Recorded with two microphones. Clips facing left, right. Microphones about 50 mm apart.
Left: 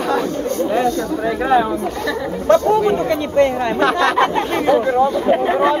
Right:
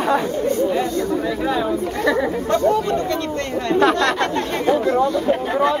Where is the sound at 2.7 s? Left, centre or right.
Left.